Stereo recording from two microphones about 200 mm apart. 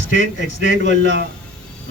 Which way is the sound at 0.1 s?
65° right (ahead or behind).